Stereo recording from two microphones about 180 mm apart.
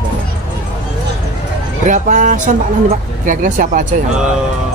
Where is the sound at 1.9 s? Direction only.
45° right (ahead or behind).